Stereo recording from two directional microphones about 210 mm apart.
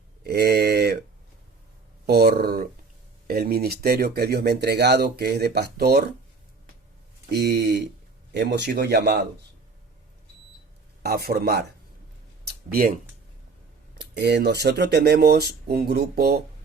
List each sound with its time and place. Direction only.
0.3 s a sound: 50° right (ahead or behind)
2.0 s speech: 50° right (ahead or behind)
7.3 s speech: 50° right (ahead or behind)
11.0 s speech: 45° right (ahead or behind)
12.5 s a sound: 45° right (ahead or behind)
14.2 s speech: 55° right (ahead or behind)